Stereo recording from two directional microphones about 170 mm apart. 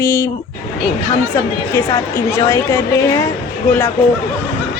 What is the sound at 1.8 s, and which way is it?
Speech, 15° left (ahead or behind).